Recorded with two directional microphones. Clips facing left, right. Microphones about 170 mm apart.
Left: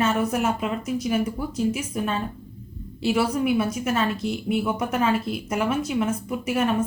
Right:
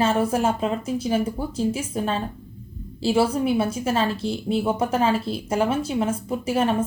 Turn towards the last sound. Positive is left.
turn(degrees=-30)  # may be behind; listen again after turning